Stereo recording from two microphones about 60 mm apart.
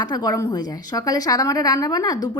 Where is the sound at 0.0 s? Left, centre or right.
Left.